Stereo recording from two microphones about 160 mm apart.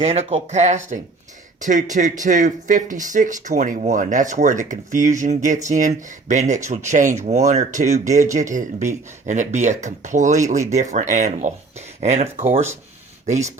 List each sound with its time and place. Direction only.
0.0 s speech: 40° right (ahead or behind)